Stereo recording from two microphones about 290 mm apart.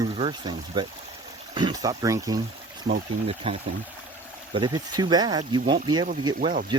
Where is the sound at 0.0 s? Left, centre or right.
Centre.